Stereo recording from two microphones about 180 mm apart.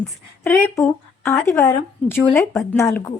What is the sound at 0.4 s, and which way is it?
A woman's voice, 10° left (ahead or behind).